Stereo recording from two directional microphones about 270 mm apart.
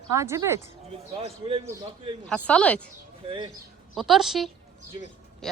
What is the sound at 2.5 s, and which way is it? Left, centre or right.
Speech, centre.